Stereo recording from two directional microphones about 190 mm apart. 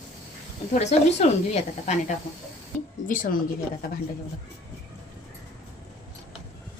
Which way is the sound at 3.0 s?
45° left (ahead or behind).